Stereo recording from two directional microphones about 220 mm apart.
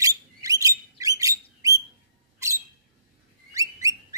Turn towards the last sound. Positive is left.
turn(degrees=-15)  # may be behind; listen again after turning